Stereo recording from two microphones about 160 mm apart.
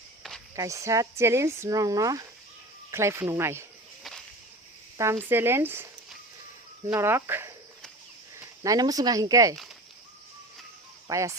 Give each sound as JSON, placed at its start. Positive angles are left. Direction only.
{"t": 0.2, "sound": "a sound", "side_deg": 0}
{"t": 0.5, "sound": "speech", "side_deg": -20}
{"t": 4.9, "sound": "speech", "side_deg": -15}
{"t": 11.1, "sound": "speech", "side_deg": -20}